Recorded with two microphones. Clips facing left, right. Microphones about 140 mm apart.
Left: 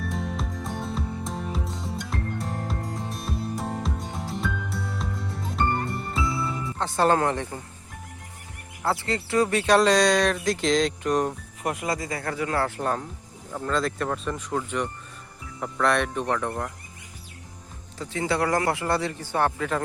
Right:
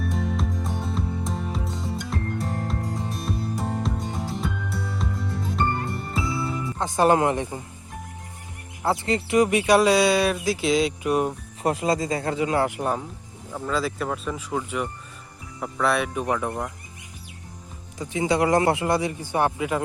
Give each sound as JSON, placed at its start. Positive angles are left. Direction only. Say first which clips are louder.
{"t": 0.1, "sound": "music", "louder": "right 4 dB", "side_deg": 0}
{"t": 6.7, "sound": "speech", "louder": "right 2 dB", "side_deg": -15}
{"t": 8.8, "sound": "speech", "louder": "right 3 dB", "side_deg": -20}
{"t": 11.6, "sound": "speech", "louder": "right 5 dB", "side_deg": -30}
{"t": 17.9, "sound": "speech", "louder": "right 3 dB", "side_deg": -15}